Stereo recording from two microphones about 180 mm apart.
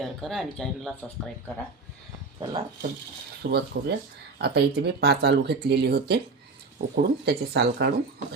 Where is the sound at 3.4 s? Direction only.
45° right (ahead or behind).